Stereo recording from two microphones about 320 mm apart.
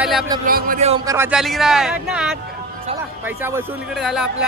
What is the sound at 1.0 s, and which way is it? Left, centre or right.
Speech, centre.